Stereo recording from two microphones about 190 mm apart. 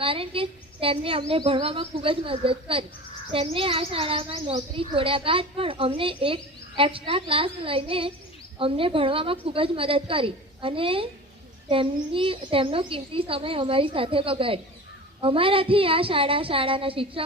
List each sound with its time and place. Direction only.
0.0 s a child's voice: 30° right (ahead or behind)